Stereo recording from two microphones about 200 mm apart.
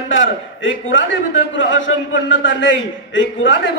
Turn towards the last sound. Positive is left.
turn(degrees=70)  # may be behind; listen again after turning